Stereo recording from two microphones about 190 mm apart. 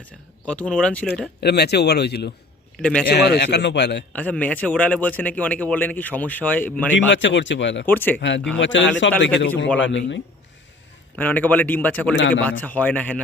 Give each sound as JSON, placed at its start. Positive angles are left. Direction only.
{"t": 0.4, "sound": "a man's voice", "side_deg": 5}
{"t": 1.4, "sound": "speech", "side_deg": 60}
{"t": 2.8, "sound": "a man's voice", "side_deg": 5}
{"t": 3.1, "sound": "speech", "side_deg": 60}
{"t": 4.1, "sound": "a man's voice", "side_deg": 5}
{"t": 7.1, "sound": "a man's voice", "side_deg": 75}
{"t": 7.9, "sound": "a man's voice", "side_deg": 10}
{"t": 8.5, "sound": "a man's voice", "side_deg": 75}
{"t": 11.2, "sound": "a man's voice", "side_deg": 10}